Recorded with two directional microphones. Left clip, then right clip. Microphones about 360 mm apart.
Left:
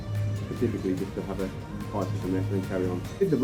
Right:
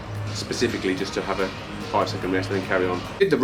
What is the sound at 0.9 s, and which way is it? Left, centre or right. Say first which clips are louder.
Speech: right 6 dB; centre.